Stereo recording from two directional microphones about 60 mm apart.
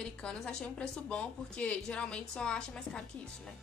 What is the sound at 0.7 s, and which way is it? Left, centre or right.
A woman's voice, left.